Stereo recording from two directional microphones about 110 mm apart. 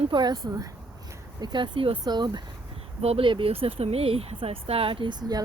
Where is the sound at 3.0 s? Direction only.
70° right (ahead or behind).